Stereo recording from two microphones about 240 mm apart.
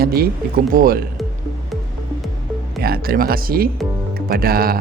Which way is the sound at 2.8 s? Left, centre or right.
Right.